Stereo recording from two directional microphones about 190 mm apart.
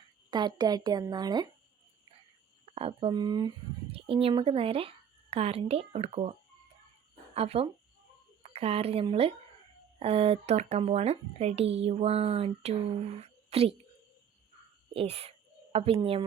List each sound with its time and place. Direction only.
0.3 s speech: 25° right (ahead or behind)
2.7 s a woman's voice: 30° right (ahead or behind)
7.3 s speech: 30° right (ahead or behind)
14.9 s speech: 35° right (ahead or behind)